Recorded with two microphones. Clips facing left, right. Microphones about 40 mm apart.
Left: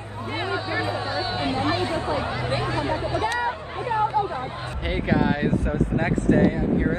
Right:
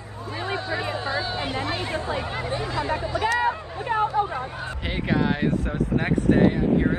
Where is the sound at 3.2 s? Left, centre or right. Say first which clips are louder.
Right 6 dB; right.